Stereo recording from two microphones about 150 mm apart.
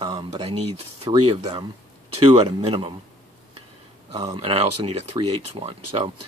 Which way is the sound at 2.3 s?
40° right (ahead or behind).